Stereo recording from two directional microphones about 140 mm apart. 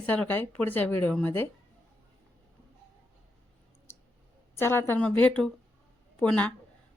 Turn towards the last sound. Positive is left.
turn(degrees=10)  # may be behind; listen again after turning